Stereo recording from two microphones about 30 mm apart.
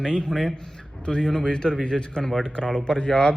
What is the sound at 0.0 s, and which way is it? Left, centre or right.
A man's voice, left.